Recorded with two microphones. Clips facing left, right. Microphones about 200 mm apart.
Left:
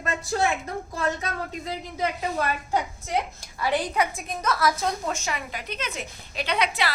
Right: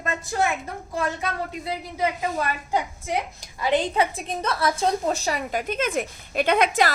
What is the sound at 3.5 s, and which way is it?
A woman's voice, 20° right (ahead or behind).